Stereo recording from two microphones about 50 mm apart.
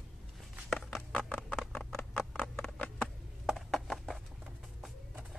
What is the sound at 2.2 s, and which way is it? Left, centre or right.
Clip-clop, left.